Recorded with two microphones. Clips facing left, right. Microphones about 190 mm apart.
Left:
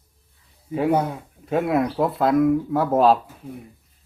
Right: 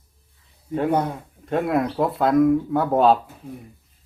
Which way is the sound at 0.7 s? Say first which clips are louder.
Left 1 dB; 5° left (ahead or behind).